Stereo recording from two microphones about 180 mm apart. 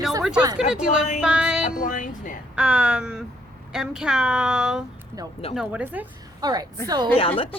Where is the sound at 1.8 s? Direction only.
45° left (ahead or behind).